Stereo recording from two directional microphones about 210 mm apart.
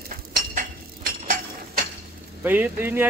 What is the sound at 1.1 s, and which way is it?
Cutlery, 45° right (ahead or behind).